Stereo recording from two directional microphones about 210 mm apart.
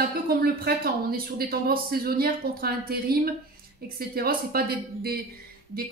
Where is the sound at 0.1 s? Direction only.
45° right (ahead or behind).